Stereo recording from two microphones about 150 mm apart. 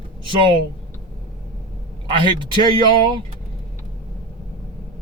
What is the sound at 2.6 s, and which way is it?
Speech, 35° right (ahead or behind).